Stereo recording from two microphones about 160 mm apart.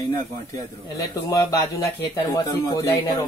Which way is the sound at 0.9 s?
20° left (ahead or behind).